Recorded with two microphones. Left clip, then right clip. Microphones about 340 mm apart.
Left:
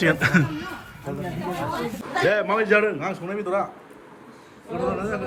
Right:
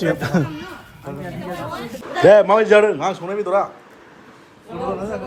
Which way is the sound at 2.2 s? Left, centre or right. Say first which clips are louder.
Right 10 dB; centre.